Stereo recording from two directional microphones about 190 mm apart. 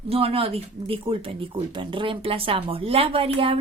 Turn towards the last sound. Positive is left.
turn(degrees=-30)  # may be behind; listen again after turning